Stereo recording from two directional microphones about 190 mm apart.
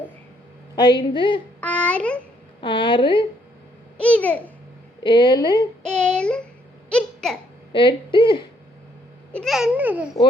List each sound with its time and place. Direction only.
1.1 s speech: 25° left (ahead or behind)
1.6 s speech: 5° left (ahead or behind)
2.6 s speech: 25° left (ahead or behind)
3.9 s a child's voice: 5° left (ahead or behind)
5.0 s speech: 20° left (ahead or behind)
5.8 s child singing: 5° left (ahead or behind)
6.9 s babbling: 5° left (ahead or behind)
7.7 s speech: 25° left (ahead or behind)
9.3 s a child's voice: centre (ahead or behind)